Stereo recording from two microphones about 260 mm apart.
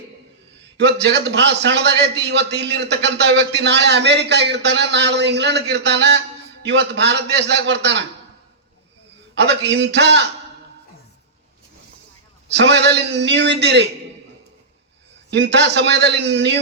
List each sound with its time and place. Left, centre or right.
0.8 s a man's voice: right
9.4 s a man's voice: right
12.5 s a man's voice: right
15.3 s a man's voice: right